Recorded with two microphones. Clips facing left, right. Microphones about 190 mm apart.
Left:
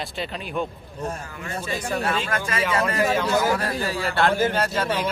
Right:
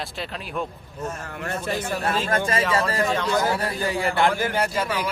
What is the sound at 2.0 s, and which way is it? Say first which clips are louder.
Speech: right 2 dB; 35° right (ahead or behind).